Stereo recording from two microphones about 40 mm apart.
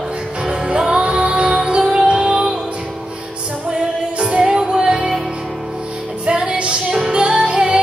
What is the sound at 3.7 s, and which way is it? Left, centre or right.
Music, right.